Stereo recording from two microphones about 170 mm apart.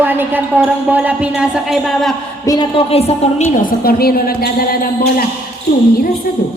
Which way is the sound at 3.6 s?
60° left (ahead or behind).